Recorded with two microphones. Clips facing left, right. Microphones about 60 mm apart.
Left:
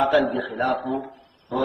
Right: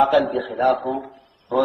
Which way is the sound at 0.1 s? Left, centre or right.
Left.